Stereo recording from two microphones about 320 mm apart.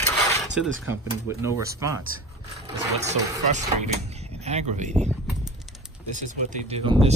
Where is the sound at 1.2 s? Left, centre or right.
Centre.